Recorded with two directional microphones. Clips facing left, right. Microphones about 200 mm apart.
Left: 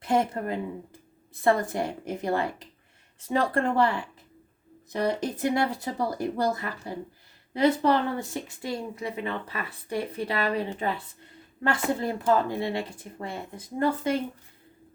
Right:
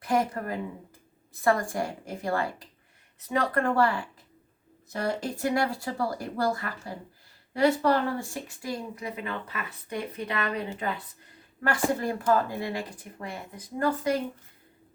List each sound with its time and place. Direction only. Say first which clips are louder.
0.0 s speech: left 2 dB; 25° left (ahead or behind)